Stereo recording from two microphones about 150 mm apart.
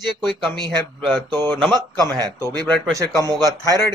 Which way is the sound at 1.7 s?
25° right (ahead or behind).